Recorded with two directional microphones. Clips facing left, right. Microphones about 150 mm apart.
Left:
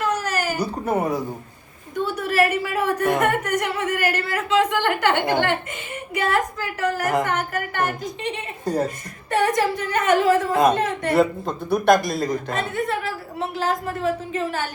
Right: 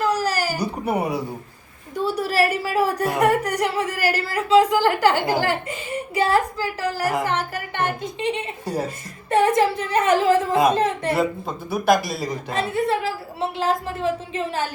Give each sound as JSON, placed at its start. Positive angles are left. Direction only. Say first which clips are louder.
{"t": 0.0, "sound": "baby cry", "louder": "right 2 dB", "side_deg": -35}
{"t": 0.6, "sound": "speech", "louder": "left 1 dB", "side_deg": -10}
{"t": 2.0, "sound": "a woman's voice", "louder": "even", "side_deg": -35}
{"t": 10.5, "sound": "a woman's voice", "louder": "even", "side_deg": -5}
{"t": 10.8, "sound": "speech", "louder": "right 2 dB", "side_deg": -30}
{"t": 11.1, "sound": "a woman's voice", "louder": "left 3 dB", "side_deg": 0}
{"t": 12.5, "sound": "a woman's voice", "louder": "right 3 dB", "side_deg": -30}